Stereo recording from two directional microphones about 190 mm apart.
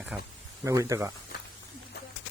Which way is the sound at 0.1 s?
10° right (ahead or behind).